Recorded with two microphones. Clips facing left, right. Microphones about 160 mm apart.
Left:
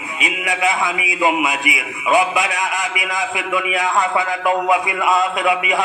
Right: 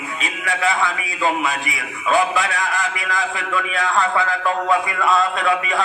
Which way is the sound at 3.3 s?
20° left (ahead or behind).